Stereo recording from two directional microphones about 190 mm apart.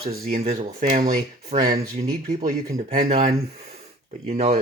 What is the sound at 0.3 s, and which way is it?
Speech, 35° right (ahead or behind).